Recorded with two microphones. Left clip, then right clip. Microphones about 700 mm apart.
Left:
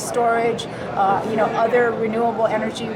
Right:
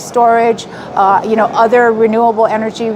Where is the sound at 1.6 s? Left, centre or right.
Right.